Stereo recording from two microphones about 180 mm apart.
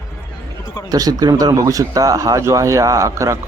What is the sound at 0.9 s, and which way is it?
Speech, 20° right (ahead or behind).